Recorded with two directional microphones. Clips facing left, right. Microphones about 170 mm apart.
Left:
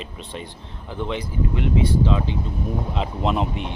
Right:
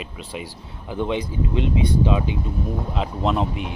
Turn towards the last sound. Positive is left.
turn(degrees=0)  # may be behind; listen again after turning